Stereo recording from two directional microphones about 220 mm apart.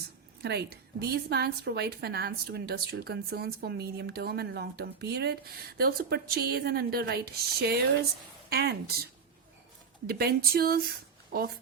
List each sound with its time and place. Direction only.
0.4 s a woman's voice: 45° right (ahead or behind)
10.1 s a woman's voice: 45° right (ahead or behind)